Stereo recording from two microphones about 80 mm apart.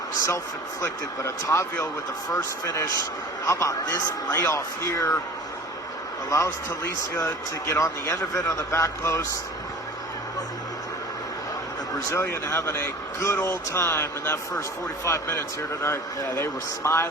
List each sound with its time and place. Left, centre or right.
0.8 s speech: left
6.3 s speech: left
11.9 s speech: left